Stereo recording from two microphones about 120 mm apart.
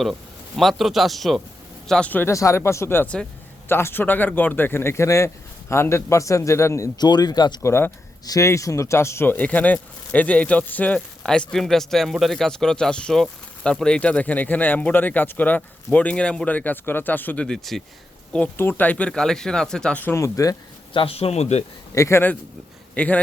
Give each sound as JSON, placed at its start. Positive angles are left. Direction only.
{"t": 0.0, "sound": "a man's voice", "side_deg": 0}
{"t": 7.0, "sound": "speech", "side_deg": 35}
{"t": 7.6, "sound": "speech", "side_deg": 20}
{"t": 18.3, "sound": "speech", "side_deg": 15}
{"t": 20.9, "sound": "speech", "side_deg": 50}
{"t": 21.9, "sound": "speech", "side_deg": 25}